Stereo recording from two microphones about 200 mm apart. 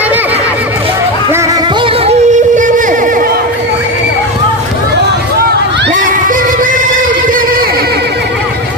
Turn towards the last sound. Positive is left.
turn(degrees=-45)  # may be behind; listen again after turning